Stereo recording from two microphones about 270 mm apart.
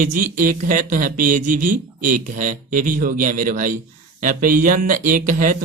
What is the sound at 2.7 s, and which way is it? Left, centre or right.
Speech, right.